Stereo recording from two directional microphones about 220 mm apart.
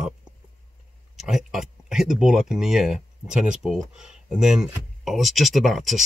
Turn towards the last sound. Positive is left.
turn(degrees=0)  # may be behind; listen again after turning